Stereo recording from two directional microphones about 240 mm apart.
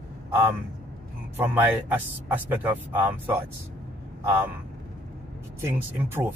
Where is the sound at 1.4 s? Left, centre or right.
Centre.